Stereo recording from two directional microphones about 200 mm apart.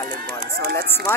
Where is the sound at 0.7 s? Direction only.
10° left (ahead or behind).